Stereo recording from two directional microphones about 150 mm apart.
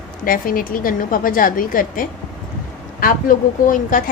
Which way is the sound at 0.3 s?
70° left (ahead or behind).